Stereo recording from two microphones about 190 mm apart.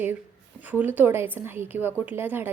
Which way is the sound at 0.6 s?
10° right (ahead or behind).